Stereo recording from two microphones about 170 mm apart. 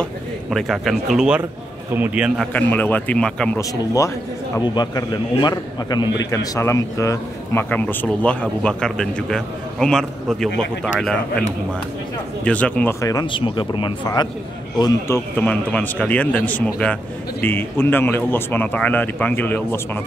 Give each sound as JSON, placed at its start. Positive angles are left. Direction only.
{"t": 0.0, "sound": "a man's voice", "side_deg": 0}
{"t": 2.5, "sound": "a man's voice", "side_deg": 10}
{"t": 3.5, "sound": "a man's voice", "side_deg": 20}
{"t": 12.4, "sound": "a man's voice", "side_deg": 5}
{"t": 13.0, "sound": "a man's voice", "side_deg": 25}